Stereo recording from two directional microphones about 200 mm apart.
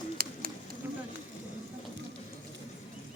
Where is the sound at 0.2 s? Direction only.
50° right (ahead or behind).